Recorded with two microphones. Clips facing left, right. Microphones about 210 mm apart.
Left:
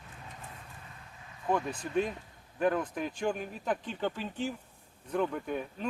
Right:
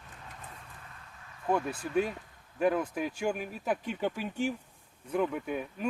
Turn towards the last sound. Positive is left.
turn(degrees=-5)  # may be behind; listen again after turning